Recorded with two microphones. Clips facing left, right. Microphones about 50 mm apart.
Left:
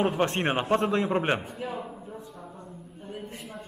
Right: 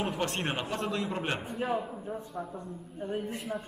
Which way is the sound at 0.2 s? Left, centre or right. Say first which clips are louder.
Left 6 dB; left.